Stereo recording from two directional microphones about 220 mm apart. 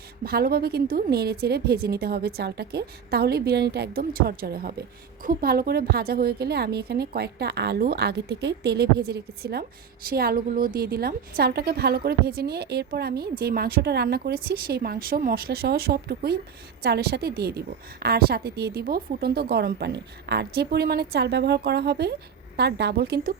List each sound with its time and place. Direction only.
0.3 s a woman's voice: 45° right (ahead or behind)